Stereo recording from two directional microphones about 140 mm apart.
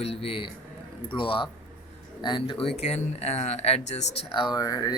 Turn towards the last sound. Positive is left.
turn(degrees=25)  # may be behind; listen again after turning